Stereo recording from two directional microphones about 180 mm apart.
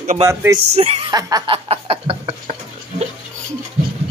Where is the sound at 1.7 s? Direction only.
30° right (ahead or behind).